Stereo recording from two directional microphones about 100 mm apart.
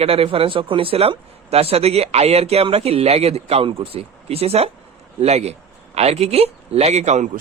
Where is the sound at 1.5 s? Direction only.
85° right.